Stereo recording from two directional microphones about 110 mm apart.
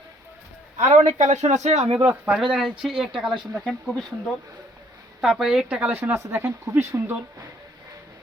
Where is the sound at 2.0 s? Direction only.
15° right (ahead or behind).